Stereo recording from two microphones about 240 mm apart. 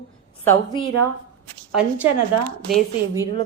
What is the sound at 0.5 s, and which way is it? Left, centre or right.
Speech, left.